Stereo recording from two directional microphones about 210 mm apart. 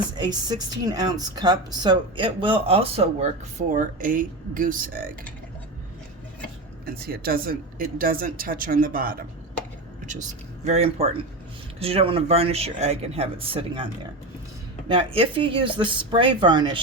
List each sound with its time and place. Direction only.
0.2 s speech: 20° right (ahead or behind)
3.7 s speech: 40° right (ahead or behind)
6.8 s speech: 45° right (ahead or behind); by 16.8 s 20° right (ahead or behind)